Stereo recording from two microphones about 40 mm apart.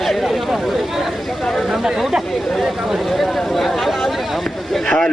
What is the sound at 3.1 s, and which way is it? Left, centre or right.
Chatter, centre.